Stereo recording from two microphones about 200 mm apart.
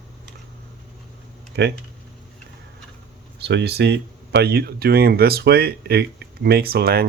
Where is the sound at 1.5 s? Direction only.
55° right (ahead or behind).